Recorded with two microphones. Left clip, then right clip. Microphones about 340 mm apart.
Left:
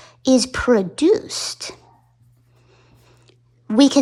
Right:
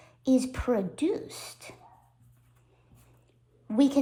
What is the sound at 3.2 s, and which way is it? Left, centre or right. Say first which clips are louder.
Chewing: left 11 dB; left.